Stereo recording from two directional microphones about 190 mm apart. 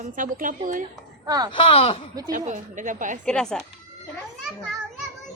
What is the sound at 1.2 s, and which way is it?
Speech, 20° right (ahead or behind).